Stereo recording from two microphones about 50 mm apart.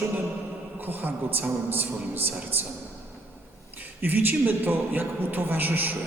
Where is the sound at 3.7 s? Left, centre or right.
Right.